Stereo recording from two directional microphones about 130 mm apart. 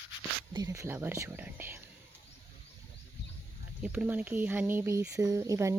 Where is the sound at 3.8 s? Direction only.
10° right (ahead or behind).